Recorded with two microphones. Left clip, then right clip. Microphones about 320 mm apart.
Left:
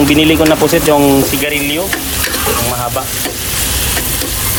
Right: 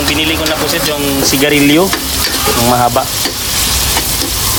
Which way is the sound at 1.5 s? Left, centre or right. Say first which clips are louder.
Right 6 dB; right.